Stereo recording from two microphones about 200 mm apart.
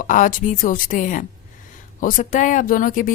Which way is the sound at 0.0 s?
40° left (ahead or behind).